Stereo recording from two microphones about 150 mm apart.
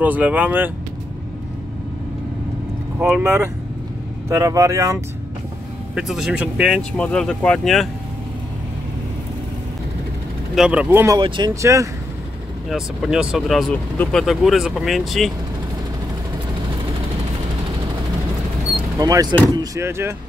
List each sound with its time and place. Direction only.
0.0 s speech: 10° right (ahead or behind)
3.0 s speech: 15° right (ahead or behind)
5.9 s speech: 5° right (ahead or behind)
10.5 s speech: 5° right (ahead or behind)
11.1 s speech: 30° right (ahead or behind)
11.6 s speech: 20° right (ahead or behind)
12.6 s speech: 5° right (ahead or behind)
18.9 s speech: 25° right (ahead or behind)